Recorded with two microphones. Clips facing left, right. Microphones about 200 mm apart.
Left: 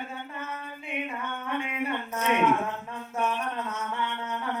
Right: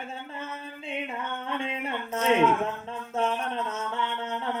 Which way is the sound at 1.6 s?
30° right (ahead or behind).